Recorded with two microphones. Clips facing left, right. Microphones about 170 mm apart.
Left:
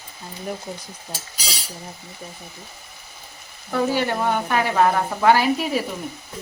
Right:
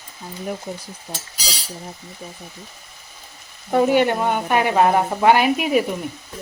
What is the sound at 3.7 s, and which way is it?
Speech, 20° right (ahead or behind).